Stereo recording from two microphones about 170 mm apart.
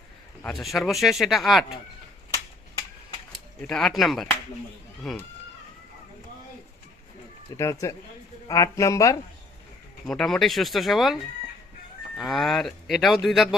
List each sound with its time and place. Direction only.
0.4 s speech: centre (ahead or behind)
3.6 s speech: 5° left (ahead or behind)
7.5 s speech: 20° left (ahead or behind)
10.1 s speech: 5° left (ahead or behind)